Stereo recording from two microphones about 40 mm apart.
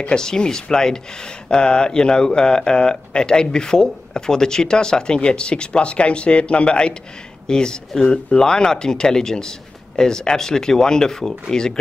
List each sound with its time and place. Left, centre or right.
0.0 s speech: centre